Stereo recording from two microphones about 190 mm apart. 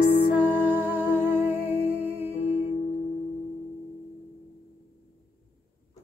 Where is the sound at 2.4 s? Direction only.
35° left (ahead or behind).